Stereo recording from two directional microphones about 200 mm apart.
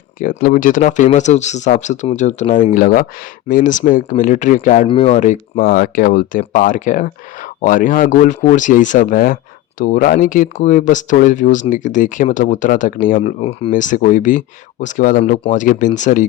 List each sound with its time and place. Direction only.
0.2 s speech: 45° left (ahead or behind)
4.9 s speech: 25° left (ahead or behind)